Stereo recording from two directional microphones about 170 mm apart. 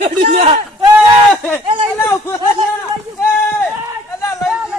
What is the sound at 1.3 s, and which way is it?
Speech, 10° left (ahead or behind).